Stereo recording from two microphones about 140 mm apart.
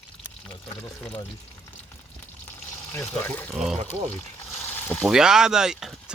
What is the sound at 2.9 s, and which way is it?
Speech, 15° left (ahead or behind).